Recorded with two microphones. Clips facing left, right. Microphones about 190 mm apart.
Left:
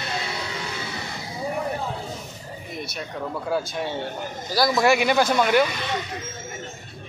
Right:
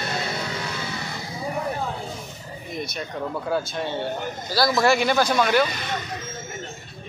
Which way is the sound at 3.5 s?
10° left (ahead or behind).